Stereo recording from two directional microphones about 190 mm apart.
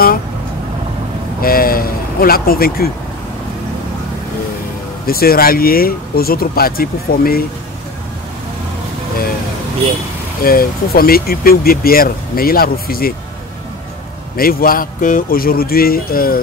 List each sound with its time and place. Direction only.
1.4 s speech: 50° left (ahead or behind)
5.0 s speech: 50° left (ahead or behind)
10.4 s speech: 50° left (ahead or behind)
14.3 s speech: 50° left (ahead or behind)